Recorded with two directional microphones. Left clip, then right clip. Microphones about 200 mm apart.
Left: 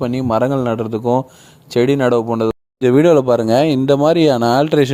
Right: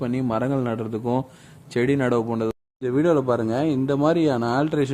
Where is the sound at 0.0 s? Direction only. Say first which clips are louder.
Left 8 dB; 25° left (ahead or behind).